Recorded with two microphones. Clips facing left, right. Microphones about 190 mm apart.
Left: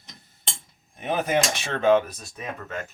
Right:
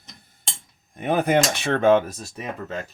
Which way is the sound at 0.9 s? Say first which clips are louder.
Right 4 dB; 60° right (ahead or behind).